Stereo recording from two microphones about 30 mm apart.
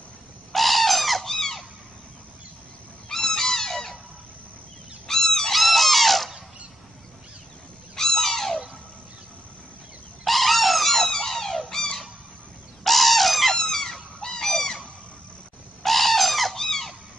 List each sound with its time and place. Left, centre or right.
0.5 s bird: centre
1.3 s squeak: centre
3.1 s a sound: centre
5.0 s goose: centre
5.5 s a sound: centre
7.9 s a sound: centre
10.2 s cat: centre
12.8 s bird: centre
13.6 s squeak: centre
14.2 s bird: centre
15.8 s bird: centre
16.5 s a sound: centre